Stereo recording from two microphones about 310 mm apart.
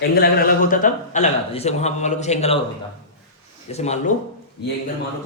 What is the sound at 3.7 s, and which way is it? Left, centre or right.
Speech, left.